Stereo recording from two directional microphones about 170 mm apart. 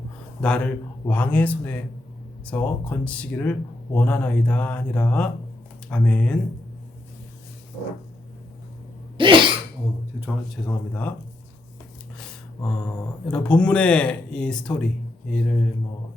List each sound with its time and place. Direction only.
0.4 s speech: 5° left (ahead or behind)
9.1 s cough: 30° right (ahead or behind)
10.2 s speech: 5° left (ahead or behind)
13.2 s speech: 5° left (ahead or behind)